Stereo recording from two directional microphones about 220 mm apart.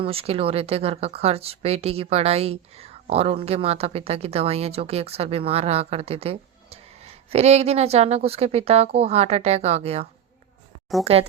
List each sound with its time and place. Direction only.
0.0 s speech: 25° right (ahead or behind)